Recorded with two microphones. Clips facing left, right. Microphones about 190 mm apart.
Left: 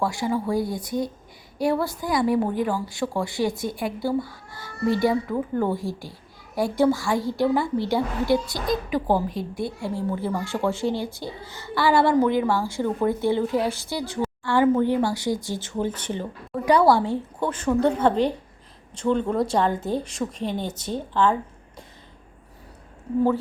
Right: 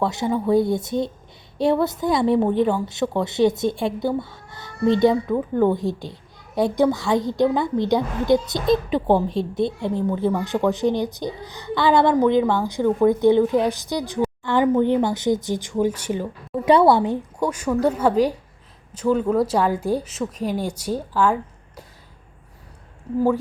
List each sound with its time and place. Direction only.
0.0 s a woman's voice: 20° right (ahead or behind)
16.6 s a woman's voice: 25° right (ahead or behind); by 21.3 s 10° right (ahead or behind)